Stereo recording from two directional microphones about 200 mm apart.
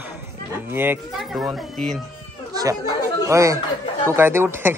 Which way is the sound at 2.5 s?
20° right (ahead or behind).